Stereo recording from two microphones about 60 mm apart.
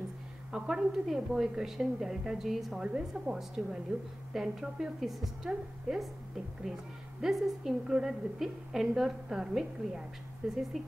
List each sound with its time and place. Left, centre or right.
0.5 s a woman's voice: centre
2.8 s a woman's voice: centre
3.1 s a woman's voice: centre